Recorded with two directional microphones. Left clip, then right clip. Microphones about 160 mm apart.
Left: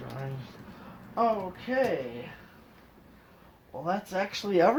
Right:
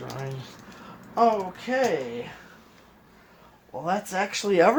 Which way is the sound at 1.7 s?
60° right (ahead or behind).